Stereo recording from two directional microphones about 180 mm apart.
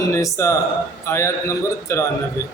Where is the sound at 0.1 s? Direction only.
15° left (ahead or behind).